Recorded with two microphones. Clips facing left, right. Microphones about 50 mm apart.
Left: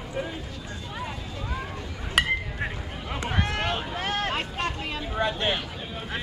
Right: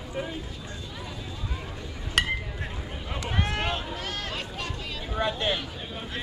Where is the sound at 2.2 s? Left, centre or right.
Centre.